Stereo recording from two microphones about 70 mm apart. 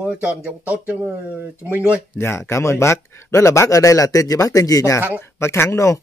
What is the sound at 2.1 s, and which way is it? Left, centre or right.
Speech, left.